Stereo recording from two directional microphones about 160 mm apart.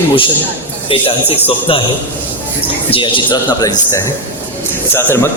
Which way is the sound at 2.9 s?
30° left (ahead or behind).